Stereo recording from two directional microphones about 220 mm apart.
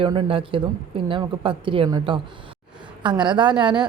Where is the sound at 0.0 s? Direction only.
25° right (ahead or behind).